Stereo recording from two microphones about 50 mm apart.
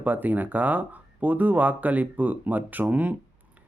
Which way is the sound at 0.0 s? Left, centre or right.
Right.